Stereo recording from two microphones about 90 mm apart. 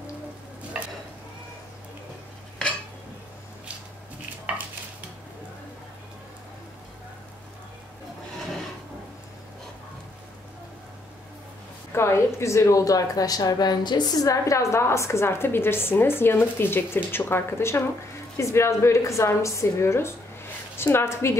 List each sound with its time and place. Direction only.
11.9 s a woman's voice: 30° left (ahead or behind); by 14.2 s 50° left (ahead or behind)
14.2 s a woman's voice: 35° left (ahead or behind)